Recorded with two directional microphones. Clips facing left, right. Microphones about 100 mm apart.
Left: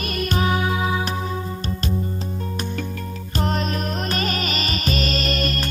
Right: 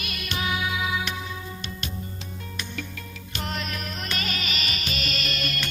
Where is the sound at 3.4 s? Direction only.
40° left (ahead or behind).